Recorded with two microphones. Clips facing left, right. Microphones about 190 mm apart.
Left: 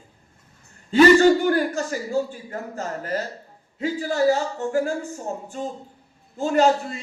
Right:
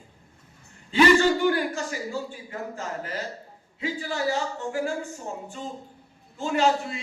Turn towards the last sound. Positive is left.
turn(degrees=40)  # may be behind; listen again after turning